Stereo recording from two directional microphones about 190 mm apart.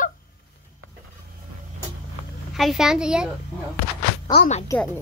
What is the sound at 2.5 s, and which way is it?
Speech, centre (ahead or behind).